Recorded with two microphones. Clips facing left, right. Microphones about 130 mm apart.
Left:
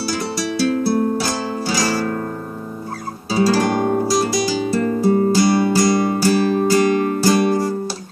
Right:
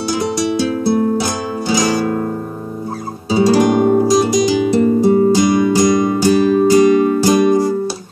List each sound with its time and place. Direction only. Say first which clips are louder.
0.1 s music: right 9 dB; 20° right (ahead or behind)
3.3 s guitar: right 5 dB; 20° right (ahead or behind)